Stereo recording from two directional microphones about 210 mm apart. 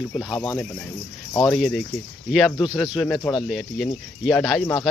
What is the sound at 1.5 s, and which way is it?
Speech, centre (ahead or behind).